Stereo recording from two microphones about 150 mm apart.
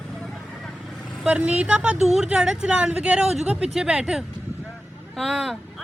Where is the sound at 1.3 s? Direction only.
10° right (ahead or behind).